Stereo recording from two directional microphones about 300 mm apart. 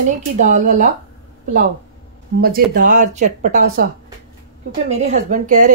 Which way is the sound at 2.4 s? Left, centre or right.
Right.